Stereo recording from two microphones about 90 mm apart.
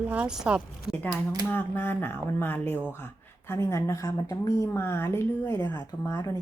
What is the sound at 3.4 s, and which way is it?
Speech, 30° left (ahead or behind).